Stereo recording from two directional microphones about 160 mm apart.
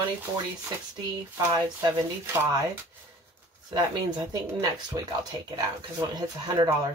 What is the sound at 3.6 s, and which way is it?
Speech, 25° right (ahead or behind).